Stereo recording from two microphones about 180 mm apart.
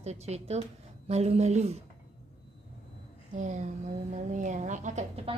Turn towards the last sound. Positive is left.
turn(degrees=-40)  # may be behind; listen again after turning